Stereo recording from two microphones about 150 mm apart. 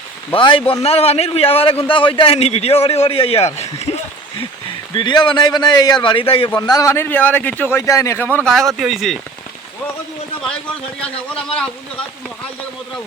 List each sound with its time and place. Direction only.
0.3 s a man's voice: 35° left (ahead or behind)
4.9 s a man's voice: 30° left (ahead or behind)
6.6 s a man's voice: 25° left (ahead or behind); by 9.1 s centre (ahead or behind)
11.0 s a man's voice: 5° left (ahead or behind)